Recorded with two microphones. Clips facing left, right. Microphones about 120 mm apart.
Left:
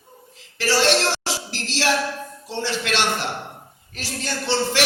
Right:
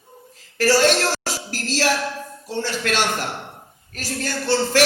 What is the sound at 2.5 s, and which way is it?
A woman's voice, 45° right (ahead or behind).